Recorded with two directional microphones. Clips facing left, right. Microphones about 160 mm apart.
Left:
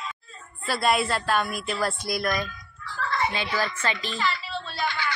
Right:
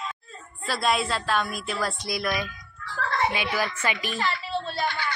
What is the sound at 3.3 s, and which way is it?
Speech, 10° right (ahead or behind).